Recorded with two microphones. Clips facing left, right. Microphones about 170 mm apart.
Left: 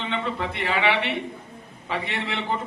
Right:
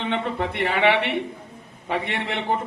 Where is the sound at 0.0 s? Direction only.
55° right (ahead or behind).